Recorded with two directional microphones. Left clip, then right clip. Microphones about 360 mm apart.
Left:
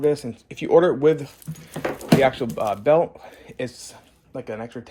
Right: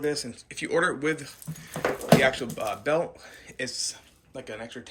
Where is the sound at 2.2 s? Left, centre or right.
Centre.